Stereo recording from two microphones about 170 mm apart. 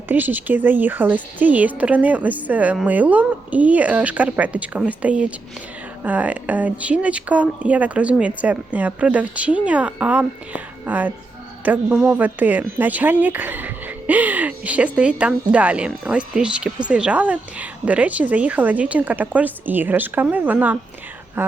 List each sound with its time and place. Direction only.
0.1 s speech: 10° right (ahead or behind)